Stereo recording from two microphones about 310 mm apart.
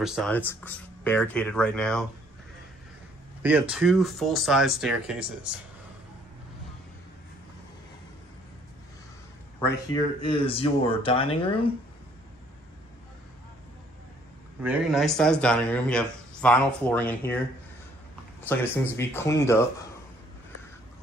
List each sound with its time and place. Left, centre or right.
0.0 s speech: centre
3.7 s speech: centre
9.7 s speech: centre
14.6 s speech: centre
18.5 s speech: centre